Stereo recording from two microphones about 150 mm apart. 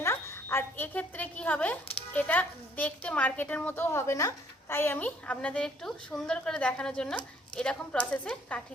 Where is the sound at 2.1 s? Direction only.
10° left (ahead or behind).